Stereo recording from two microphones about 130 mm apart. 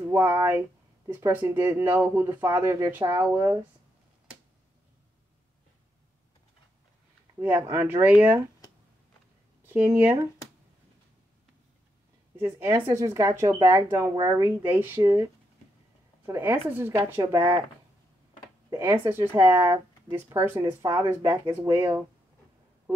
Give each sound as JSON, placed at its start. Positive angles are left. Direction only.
{"t": 0.1, "sound": "speech", "side_deg": -20}
{"t": 7.3, "sound": "speech", "side_deg": -15}
{"t": 9.7, "sound": "speech", "side_deg": -15}
{"t": 12.4, "sound": "speech", "side_deg": -20}
{"t": 14.7, "sound": "speech", "side_deg": -15}
{"t": 15.0, "sound": "speech", "side_deg": -25}
{"t": 16.3, "sound": "speech", "side_deg": -20}
{"t": 18.7, "sound": "speech", "side_deg": -25}